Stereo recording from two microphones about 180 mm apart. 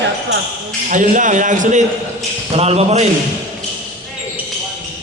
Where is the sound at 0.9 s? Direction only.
45° right (ahead or behind).